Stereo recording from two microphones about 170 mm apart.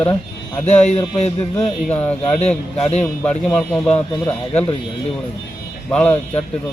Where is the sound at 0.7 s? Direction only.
40° left (ahead or behind).